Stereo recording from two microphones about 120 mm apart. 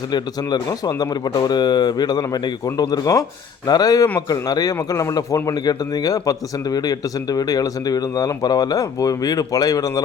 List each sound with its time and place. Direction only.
0.1 s a man's voice: 35° left (ahead or behind)